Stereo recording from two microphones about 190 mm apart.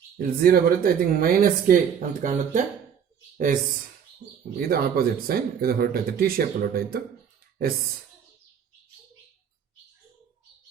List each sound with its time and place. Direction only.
0.2 s speech: 50° right (ahead or behind)
4.7 s speech: 50° right (ahead or behind)